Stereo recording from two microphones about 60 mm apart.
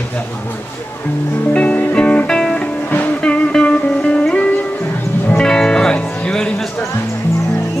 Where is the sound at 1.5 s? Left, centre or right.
Left.